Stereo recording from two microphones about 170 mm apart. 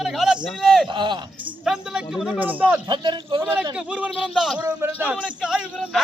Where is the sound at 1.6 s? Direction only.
5° right (ahead or behind).